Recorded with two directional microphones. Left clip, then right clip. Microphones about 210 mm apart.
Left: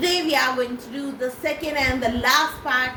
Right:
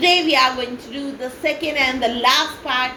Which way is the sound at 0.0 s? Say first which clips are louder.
Right 6 dB; 30° left (ahead or behind).